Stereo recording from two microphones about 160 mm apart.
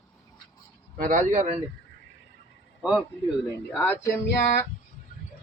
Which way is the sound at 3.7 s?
10° left (ahead or behind).